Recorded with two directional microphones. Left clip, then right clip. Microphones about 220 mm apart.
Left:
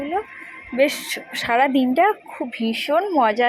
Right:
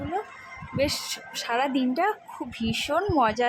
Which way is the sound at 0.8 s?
10° left (ahead or behind).